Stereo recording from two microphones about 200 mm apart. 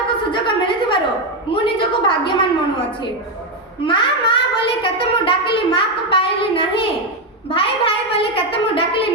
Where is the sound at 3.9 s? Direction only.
25° left (ahead or behind).